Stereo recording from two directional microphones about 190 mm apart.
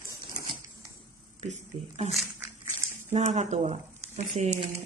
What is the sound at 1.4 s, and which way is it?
Speech, 35° right (ahead or behind).